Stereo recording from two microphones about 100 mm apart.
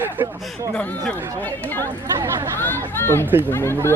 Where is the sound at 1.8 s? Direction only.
25° right (ahead or behind).